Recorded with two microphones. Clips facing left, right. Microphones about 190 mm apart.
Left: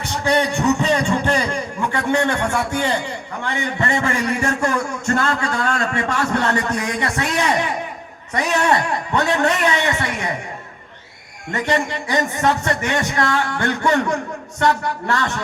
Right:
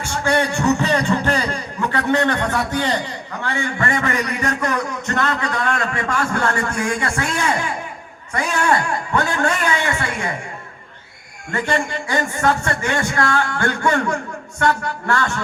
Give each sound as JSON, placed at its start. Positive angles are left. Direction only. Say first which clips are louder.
{"t": 0.1, "sound": "a sound", "louder": "left 1 dB", "side_deg": 15}
{"t": 3.4, "sound": "speech", "louder": "even", "side_deg": 15}
{"t": 11.5, "sound": "speech", "louder": "left 1 dB", "side_deg": 20}